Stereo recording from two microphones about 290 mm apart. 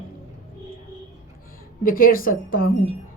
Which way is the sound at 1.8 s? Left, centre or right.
Left.